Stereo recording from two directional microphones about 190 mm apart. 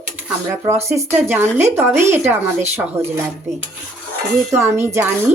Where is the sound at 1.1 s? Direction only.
10° right (ahead or behind).